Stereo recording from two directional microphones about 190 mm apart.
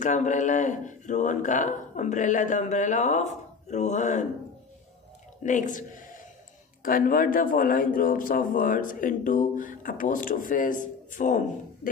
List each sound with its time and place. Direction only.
0.0 s speech: 40° left (ahead or behind)
5.4 s a man's voice: 40° left (ahead or behind)